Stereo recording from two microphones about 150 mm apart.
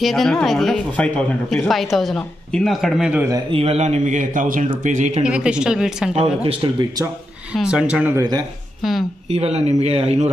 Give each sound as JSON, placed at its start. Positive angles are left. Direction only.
{"t": 0.0, "sound": "speech", "side_deg": 0}
{"t": 3.5, "sound": "a man's voice", "side_deg": -45}
{"t": 5.2, "sound": "speech", "side_deg": -5}
{"t": 6.1, "sound": "speech", "side_deg": -40}
{"t": 7.5, "sound": "speech", "side_deg": -5}
{"t": 9.3, "sound": "speech", "side_deg": -45}